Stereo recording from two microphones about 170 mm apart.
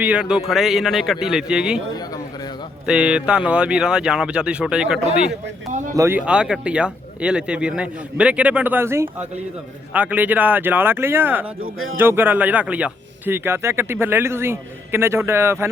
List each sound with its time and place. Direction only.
0.0 s speech: 5° right (ahead or behind)
2.8 s speech: 5° right (ahead or behind)
5.9 s speech: 20° right (ahead or behind)
6.1 s speech: 5° right (ahead or behind)